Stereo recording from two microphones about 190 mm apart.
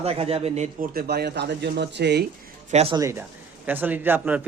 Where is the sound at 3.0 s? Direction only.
15° right (ahead or behind).